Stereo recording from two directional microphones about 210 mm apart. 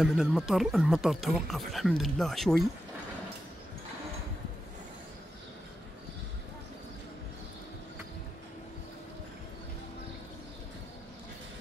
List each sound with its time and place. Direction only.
0.0 s speech: centre (ahead or behind)